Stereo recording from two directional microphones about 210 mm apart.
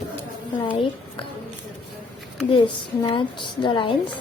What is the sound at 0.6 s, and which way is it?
Speech, 25° left (ahead or behind).